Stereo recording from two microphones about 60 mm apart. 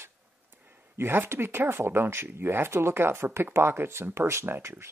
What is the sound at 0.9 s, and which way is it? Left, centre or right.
Speech, right.